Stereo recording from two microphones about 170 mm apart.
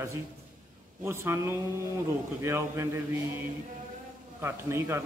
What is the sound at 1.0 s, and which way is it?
A man's voice, 15° right (ahead or behind).